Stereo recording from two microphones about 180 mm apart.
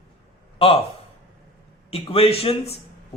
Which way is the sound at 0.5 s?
30° left (ahead or behind).